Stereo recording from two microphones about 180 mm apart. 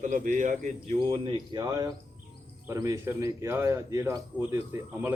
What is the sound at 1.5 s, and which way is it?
Speech, 20° right (ahead or behind).